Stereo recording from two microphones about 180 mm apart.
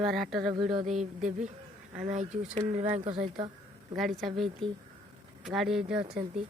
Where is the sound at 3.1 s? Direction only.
30° right (ahead or behind).